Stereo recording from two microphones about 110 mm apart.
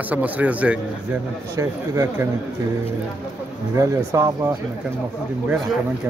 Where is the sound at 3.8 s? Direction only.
30° right (ahead or behind).